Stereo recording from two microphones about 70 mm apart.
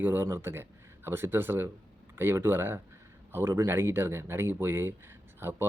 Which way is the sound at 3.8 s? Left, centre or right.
Right.